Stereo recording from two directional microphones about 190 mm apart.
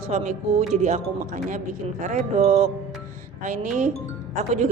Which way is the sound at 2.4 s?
35° right (ahead or behind).